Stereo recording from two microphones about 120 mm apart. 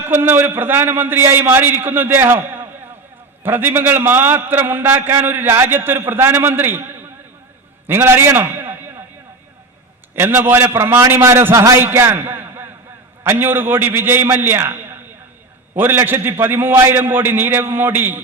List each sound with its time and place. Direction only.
0.0 s a man's voice: 20° right (ahead or behind)
7.9 s a sound: 20° right (ahead or behind)
10.2 s a man's voice: 20° right (ahead or behind)